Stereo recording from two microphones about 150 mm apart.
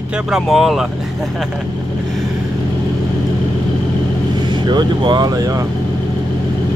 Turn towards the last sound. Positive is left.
turn(degrees=-25)  # may be behind; listen again after turning